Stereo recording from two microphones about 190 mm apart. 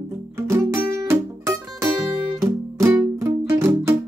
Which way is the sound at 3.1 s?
15° right (ahead or behind).